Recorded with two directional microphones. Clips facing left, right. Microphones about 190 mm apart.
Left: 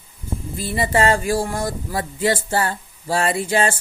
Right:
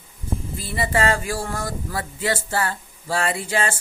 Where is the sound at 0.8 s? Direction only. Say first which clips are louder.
Left 3 dB; 35° left (ahead or behind).